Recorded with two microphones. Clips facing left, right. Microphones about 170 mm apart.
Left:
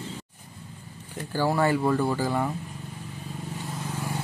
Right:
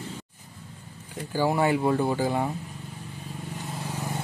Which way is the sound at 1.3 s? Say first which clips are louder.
Even; 15° right (ahead or behind).